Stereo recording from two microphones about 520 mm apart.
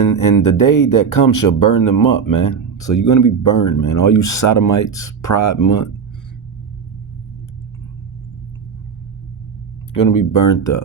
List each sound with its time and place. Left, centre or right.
0.0 s speech: left
10.2 s speech: left